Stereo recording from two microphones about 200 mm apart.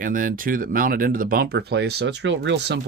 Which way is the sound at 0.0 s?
40° right (ahead or behind).